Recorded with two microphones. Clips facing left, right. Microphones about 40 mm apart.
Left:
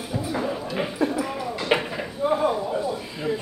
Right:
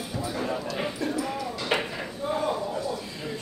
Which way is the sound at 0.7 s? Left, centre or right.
Left.